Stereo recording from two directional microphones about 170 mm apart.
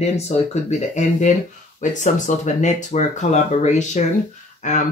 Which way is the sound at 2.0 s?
45° left (ahead or behind).